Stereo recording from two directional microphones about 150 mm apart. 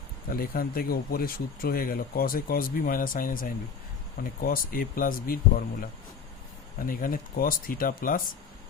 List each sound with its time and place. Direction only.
0.3 s speech: 75° left (ahead or behind)
6.8 s speech: 65° left (ahead or behind)